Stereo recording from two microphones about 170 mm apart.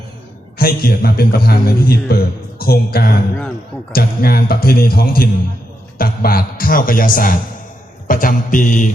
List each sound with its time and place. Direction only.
0.6 s a man's voice: 60° left (ahead or behind)
8.0 s mantra: 50° left (ahead or behind)